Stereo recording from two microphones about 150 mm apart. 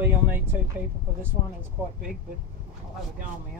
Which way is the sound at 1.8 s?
10° right (ahead or behind).